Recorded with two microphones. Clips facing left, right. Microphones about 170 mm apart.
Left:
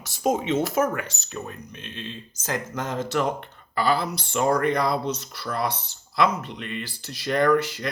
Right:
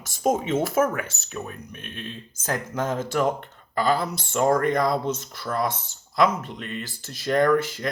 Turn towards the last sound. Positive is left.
turn(degrees=-50)  # may be behind; listen again after turning